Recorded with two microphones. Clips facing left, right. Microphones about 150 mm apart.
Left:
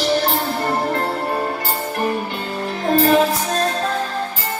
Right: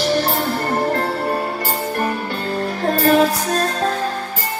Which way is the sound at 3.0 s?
40° right (ahead or behind).